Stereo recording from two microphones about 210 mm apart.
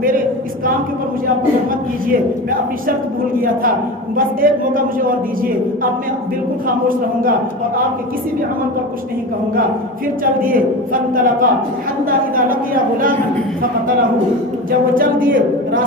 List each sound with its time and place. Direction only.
2.0 s a man's voice: 40° right (ahead or behind)
6.7 s a man's voice: 40° right (ahead or behind)
10.4 s a man's voice: 40° right (ahead or behind)
14.7 s a man's voice: 40° right (ahead or behind)